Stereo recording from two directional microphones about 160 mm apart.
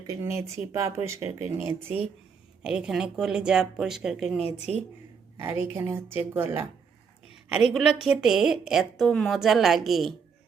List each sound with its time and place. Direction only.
0.1 s a woman's voice: 20° right (ahead or behind); by 4.8 s centre (ahead or behind)
5.4 s speech: 15° right (ahead or behind)
7.5 s a woman's voice: centre (ahead or behind)